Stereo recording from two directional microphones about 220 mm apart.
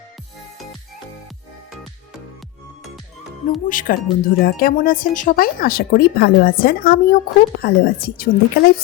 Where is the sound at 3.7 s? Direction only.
40° left (ahead or behind).